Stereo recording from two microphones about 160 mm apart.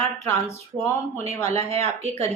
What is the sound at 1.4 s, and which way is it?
Speech, 40° right (ahead or behind).